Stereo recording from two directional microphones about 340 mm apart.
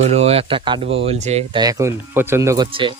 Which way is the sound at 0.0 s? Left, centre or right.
Centre.